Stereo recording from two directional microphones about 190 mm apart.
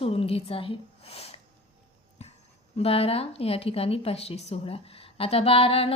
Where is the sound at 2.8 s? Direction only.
30° left (ahead or behind).